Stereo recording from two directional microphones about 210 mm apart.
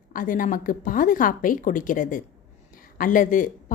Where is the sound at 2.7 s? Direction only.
40° left (ahead or behind).